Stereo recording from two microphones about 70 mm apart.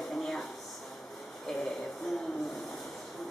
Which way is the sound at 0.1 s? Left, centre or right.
Centre.